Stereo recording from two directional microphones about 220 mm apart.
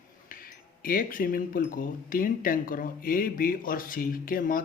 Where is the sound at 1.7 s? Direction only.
40° left (ahead or behind).